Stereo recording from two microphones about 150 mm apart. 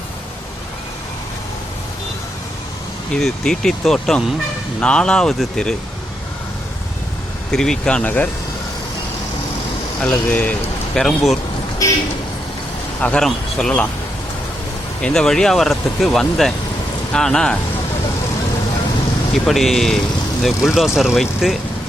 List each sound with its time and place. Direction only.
3.2 s speech: 5° left (ahead or behind)
7.5 s speech: 5° left (ahead or behind)
10.0 s a man's voice: 10° left (ahead or behind)
11.8 s a man's voice: 25° left (ahead or behind)
13.0 s speech: 5° left (ahead or behind)
15.0 s speech: 5° left (ahead or behind)
19.3 s speech: centre (ahead or behind)